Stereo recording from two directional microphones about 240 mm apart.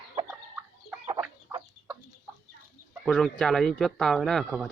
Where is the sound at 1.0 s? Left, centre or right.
Centre.